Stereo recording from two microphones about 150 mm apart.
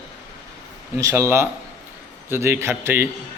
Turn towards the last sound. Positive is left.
turn(degrees=-15)  # may be behind; listen again after turning